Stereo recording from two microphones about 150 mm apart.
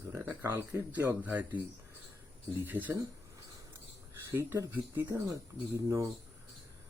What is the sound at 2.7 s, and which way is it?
Speech, 10° right (ahead or behind).